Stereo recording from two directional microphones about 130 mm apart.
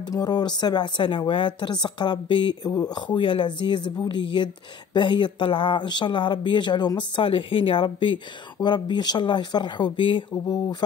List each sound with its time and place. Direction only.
0.0 s speech: 30° left (ahead or behind)